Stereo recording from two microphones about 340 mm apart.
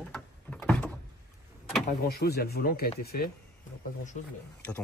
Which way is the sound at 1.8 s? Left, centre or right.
Left.